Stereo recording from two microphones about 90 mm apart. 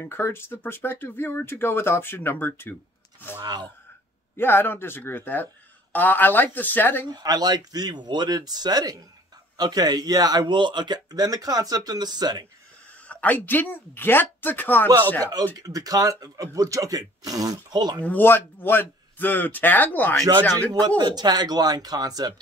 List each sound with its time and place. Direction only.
0.0 s speech: 25° left (ahead or behind)
4.4 s speech: 25° left (ahead or behind)
7.1 s speech: 50° right (ahead or behind)
13.1 s speech: 20° left (ahead or behind)
15.6 s speech: 45° right (ahead or behind)
18.0 s speech: 20° left (ahead or behind)
21.0 s speech: 50° right (ahead or behind)